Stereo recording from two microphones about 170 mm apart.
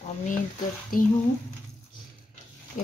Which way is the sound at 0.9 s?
55° left (ahead or behind).